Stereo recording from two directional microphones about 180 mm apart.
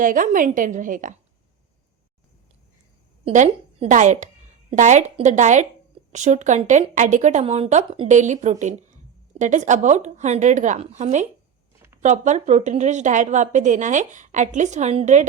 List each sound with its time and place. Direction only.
0.0 s a woman's voice: 50° right (ahead or behind)
3.2 s a woman's voice: 40° right (ahead or behind)